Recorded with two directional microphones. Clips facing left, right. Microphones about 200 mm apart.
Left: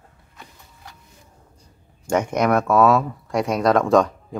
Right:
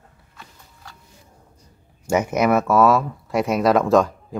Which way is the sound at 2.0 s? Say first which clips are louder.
Right 1 dB; 5° right (ahead or behind).